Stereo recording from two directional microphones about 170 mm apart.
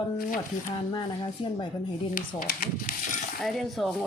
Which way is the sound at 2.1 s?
55° left (ahead or behind).